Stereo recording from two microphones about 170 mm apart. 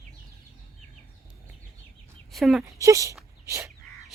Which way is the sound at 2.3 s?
Centre (ahead or behind).